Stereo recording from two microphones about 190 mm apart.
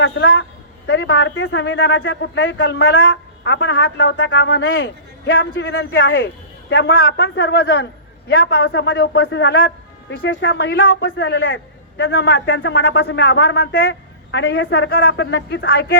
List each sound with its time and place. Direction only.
0.0 s speech: 70° left (ahead or behind)